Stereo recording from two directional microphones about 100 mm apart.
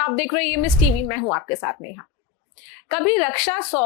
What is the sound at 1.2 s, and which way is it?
Speech, 35° left (ahead or behind).